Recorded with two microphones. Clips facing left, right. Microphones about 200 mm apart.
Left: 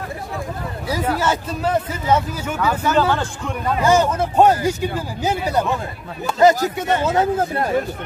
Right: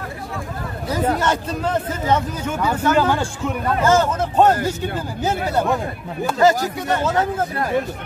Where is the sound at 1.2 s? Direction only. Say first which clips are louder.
Even; 5° left (ahead or behind).